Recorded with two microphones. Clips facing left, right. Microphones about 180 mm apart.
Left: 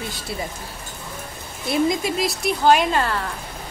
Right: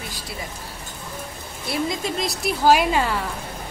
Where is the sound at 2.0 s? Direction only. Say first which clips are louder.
Left 2 dB; 5° left (ahead or behind).